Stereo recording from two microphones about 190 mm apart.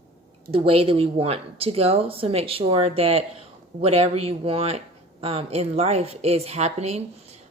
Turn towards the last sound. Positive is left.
turn(degrees=-35)  # may be behind; listen again after turning